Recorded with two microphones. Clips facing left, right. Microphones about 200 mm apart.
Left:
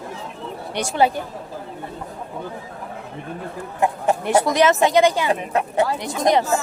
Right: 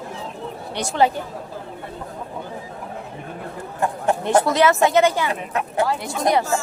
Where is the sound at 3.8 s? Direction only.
10° left (ahead or behind).